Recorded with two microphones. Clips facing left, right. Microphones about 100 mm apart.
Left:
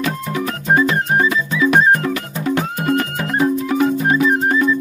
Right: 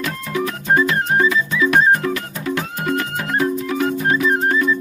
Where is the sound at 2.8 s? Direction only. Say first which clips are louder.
Left 3 dB; 45° left (ahead or behind).